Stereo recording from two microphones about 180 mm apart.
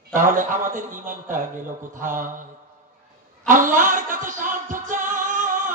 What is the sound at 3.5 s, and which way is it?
Music, 45° right (ahead or behind).